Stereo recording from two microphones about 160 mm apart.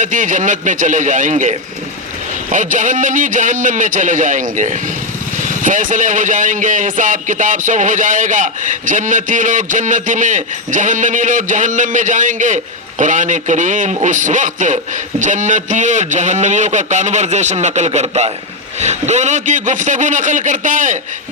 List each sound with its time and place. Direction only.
0.0 s speech: 50° right (ahead or behind)